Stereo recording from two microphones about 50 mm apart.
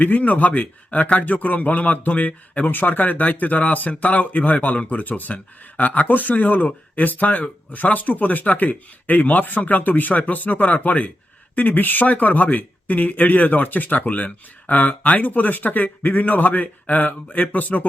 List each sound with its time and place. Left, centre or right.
0.0 s speech: left